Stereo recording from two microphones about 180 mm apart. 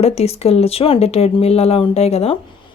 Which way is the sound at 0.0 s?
35° left (ahead or behind).